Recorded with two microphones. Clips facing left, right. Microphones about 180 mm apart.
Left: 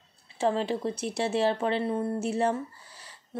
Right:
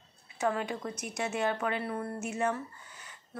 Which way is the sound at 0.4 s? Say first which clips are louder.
Left 5 dB; 30° left (ahead or behind).